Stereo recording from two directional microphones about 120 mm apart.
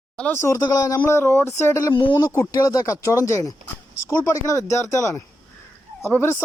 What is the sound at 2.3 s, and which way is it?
A man's voice, 30° left (ahead or behind).